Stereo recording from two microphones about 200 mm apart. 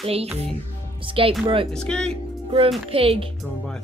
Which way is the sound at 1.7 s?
5° left (ahead or behind).